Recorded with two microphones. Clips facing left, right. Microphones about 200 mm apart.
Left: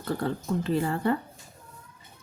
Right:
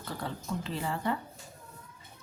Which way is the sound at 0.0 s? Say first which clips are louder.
Left 9 dB; 50° left (ahead or behind).